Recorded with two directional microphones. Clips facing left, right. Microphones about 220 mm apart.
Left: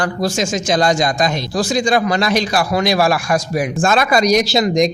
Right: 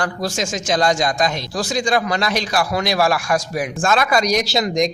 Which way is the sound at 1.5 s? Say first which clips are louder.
Left 5 dB; 25° left (ahead or behind).